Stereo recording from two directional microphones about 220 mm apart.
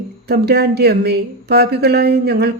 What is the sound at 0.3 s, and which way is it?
A woman's voice, 45° right (ahead or behind).